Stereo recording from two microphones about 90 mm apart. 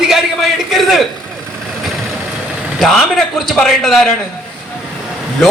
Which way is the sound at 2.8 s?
5° left (ahead or behind).